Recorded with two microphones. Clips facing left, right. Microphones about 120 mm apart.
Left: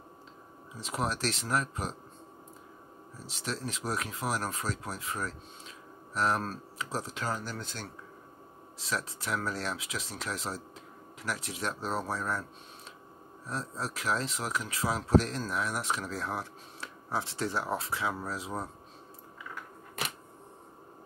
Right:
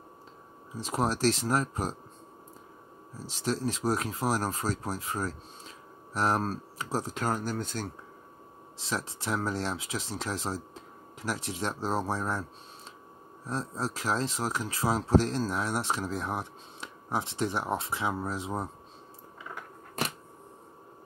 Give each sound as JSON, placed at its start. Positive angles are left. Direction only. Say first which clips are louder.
{"t": 0.7, "sound": "speech", "louder": "right 4 dB", "side_deg": -35}
{"t": 3.3, "sound": "speech", "louder": "right 6 dB", "side_deg": -35}
{"t": 8.7, "sound": "speech", "louder": "right 1 dB", "side_deg": -30}
{"t": 13.5, "sound": "speech", "louder": "right 3 dB", "side_deg": -30}